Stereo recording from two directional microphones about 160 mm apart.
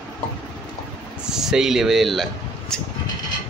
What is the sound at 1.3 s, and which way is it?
Speech, 5° right (ahead or behind).